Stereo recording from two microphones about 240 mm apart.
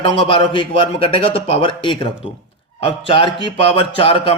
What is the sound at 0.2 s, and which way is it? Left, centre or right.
Speech, left.